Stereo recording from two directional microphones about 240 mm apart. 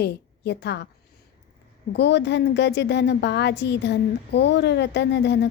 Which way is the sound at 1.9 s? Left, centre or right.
Left.